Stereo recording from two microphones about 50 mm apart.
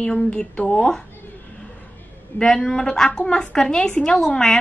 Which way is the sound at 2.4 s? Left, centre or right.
Centre.